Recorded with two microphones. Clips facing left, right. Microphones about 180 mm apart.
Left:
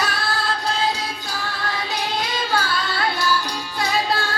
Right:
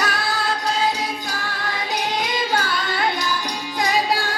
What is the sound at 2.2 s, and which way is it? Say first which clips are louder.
Music: right 1 dB; 15° right (ahead or behind).